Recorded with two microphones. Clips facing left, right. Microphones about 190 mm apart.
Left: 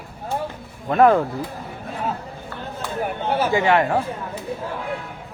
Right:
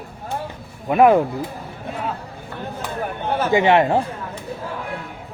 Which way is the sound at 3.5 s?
20° right (ahead or behind).